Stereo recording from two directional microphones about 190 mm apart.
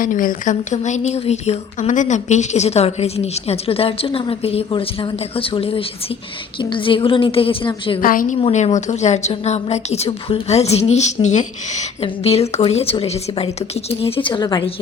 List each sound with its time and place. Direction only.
0.0 s a woman's voice: 45° left (ahead or behind); by 8.0 s 25° left (ahead or behind)
8.0 s a woman's voice: 45° left (ahead or behind)
8.4 s a woman's voice: 30° left (ahead or behind)